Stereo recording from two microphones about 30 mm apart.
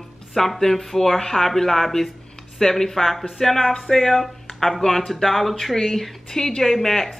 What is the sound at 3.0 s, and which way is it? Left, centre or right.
Speech, centre.